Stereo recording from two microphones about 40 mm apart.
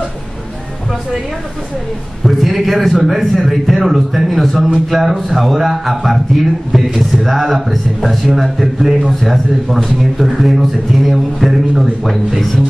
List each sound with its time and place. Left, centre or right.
2.2 s a man's voice: centre